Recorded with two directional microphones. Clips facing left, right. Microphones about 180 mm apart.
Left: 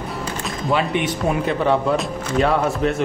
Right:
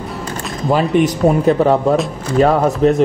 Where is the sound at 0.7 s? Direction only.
40° right (ahead or behind).